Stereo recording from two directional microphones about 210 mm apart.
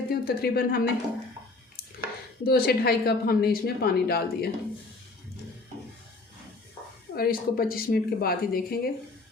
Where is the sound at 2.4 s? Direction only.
45° left (ahead or behind).